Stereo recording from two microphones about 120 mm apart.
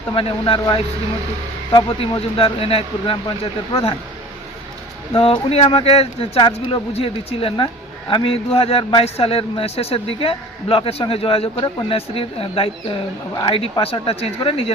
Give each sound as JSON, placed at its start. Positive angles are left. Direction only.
{"t": 0.1, "sound": "speech", "side_deg": 50}
{"t": 1.7, "sound": "speech", "side_deg": 45}
{"t": 5.1, "sound": "speech", "side_deg": 50}